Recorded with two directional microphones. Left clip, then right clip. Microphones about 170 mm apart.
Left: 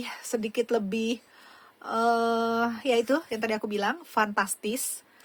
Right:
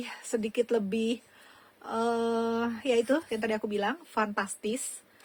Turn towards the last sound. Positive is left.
turn(degrees=25)  # may be behind; listen again after turning